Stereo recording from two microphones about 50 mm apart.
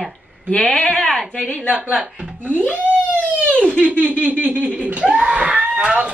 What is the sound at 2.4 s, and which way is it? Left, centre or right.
Speech, right.